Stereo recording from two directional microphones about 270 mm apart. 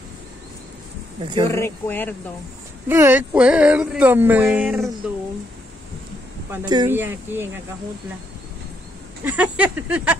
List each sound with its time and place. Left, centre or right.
1.2 s speech: centre
1.5 s speech: centre
2.9 s speech: centre
6.5 s speech: centre
9.2 s speech: centre